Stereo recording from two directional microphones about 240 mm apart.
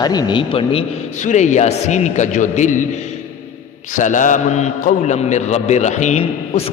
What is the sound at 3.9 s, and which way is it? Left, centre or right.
A man's voice, left.